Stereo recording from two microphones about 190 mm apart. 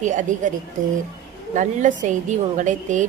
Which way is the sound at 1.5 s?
40° right (ahead or behind).